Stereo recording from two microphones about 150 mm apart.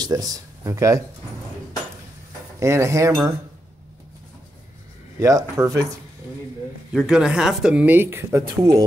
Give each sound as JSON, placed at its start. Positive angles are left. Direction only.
{"t": 0.0, "sound": "speech", "side_deg": -25}
{"t": 2.6, "sound": "speech", "side_deg": -20}
{"t": 5.2, "sound": "speech", "side_deg": -20}
{"t": 6.9, "sound": "speech", "side_deg": -5}